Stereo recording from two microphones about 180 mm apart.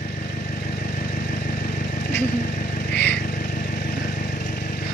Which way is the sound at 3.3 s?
50° left (ahead or behind).